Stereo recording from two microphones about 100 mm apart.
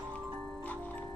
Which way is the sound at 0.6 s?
15° left (ahead or behind).